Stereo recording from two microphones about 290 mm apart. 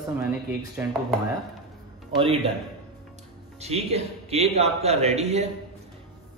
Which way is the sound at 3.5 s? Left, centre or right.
Right.